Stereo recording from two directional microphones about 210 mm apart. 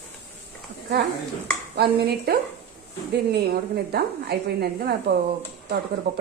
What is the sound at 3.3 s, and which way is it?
Speech, 50° right (ahead or behind).